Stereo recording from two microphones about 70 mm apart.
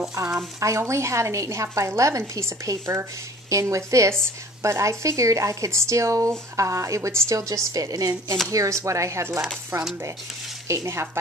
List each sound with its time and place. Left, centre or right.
0.1 s speech: right
9.7 s speech: right
10.7 s speech: right